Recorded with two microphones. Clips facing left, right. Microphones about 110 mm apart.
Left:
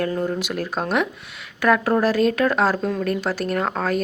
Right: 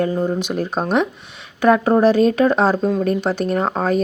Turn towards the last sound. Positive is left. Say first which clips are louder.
# right 4 dB
turn(degrees=-20)  # may be behind; listen again after turning